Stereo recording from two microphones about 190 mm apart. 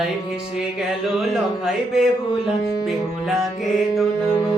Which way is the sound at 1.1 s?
Centre (ahead or behind).